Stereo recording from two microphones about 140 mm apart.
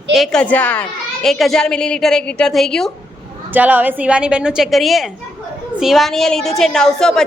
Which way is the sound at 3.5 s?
10° right (ahead or behind).